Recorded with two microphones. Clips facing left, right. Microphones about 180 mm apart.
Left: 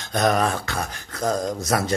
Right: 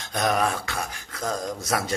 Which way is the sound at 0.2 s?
5° right (ahead or behind).